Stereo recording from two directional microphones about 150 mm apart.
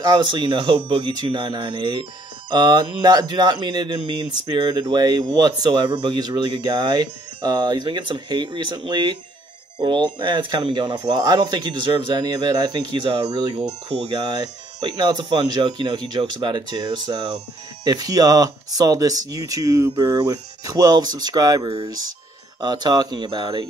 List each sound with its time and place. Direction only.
0.0 s speech: 30° right (ahead or behind)